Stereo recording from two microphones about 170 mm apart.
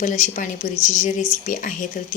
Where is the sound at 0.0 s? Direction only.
50° left (ahead or behind).